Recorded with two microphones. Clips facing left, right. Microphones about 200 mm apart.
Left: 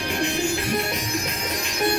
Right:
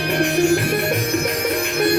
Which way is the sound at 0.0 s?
65° right (ahead or behind).